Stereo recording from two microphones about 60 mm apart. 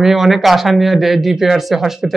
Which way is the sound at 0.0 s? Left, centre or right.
Centre.